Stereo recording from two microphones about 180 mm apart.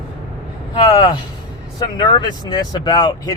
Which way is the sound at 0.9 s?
30° left (ahead or behind).